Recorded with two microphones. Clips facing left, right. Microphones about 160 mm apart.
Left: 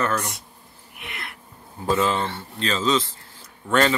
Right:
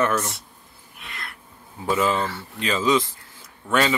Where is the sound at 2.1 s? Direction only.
25° left (ahead or behind).